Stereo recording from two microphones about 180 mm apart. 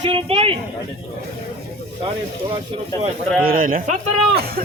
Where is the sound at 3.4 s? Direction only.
55° right (ahead or behind).